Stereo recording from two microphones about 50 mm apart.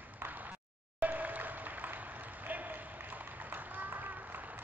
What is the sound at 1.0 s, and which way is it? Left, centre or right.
Applause, right.